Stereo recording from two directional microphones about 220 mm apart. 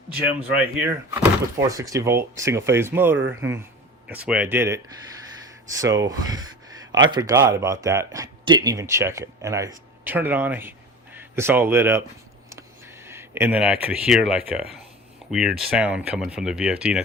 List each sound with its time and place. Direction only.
0.3 s speech: 10° right (ahead or behind)
3.2 s speech: 60° right (ahead or behind)
4.1 s speech: 5° right (ahead or behind)
13.1 s a sound: 10° right (ahead or behind)
13.8 s speech: 5° right (ahead or behind)